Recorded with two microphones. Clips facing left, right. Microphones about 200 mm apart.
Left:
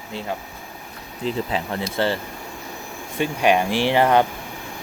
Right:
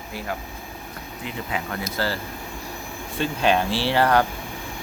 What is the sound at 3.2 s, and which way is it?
Speech, 15° left (ahead or behind).